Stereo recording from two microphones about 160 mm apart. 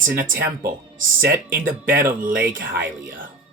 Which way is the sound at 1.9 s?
15° right (ahead or behind).